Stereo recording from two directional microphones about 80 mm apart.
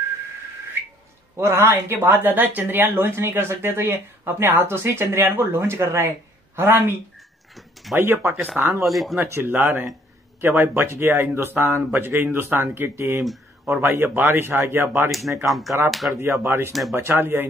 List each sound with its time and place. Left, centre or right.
1.3 s speech: right
7.5 s a sound: centre
8.5 s speech: right
8.8 s speech: centre
9.1 s speech: right
15.0 s speech: centre
16.2 s speech: right